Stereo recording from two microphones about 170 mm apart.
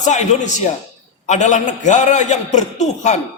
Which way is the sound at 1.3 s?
45° left (ahead or behind).